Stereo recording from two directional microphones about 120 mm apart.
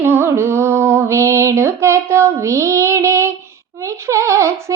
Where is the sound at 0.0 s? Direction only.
20° right (ahead or behind).